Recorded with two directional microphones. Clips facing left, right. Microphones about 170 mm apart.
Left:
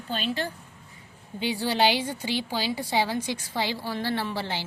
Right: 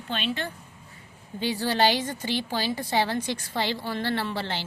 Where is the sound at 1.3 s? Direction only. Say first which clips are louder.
Even; 10° left (ahead or behind).